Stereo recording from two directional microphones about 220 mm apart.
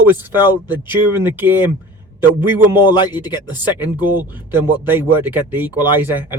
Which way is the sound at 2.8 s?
20° left (ahead or behind).